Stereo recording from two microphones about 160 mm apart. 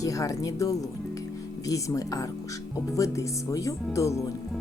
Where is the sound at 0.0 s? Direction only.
20° left (ahead or behind).